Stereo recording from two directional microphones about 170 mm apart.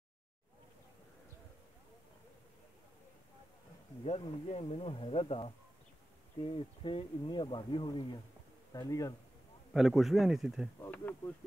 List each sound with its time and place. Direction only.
4.0 s speech: 40° left (ahead or behind); by 9.1 s 20° left (ahead or behind)
9.8 s speech: centre (ahead or behind)
10.8 s speech: 10° left (ahead or behind)